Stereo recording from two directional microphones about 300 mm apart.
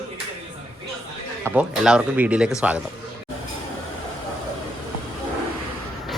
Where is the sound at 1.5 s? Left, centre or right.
Centre.